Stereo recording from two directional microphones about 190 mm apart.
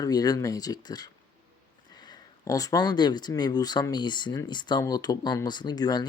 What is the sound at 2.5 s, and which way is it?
Speech, 20° left (ahead or behind).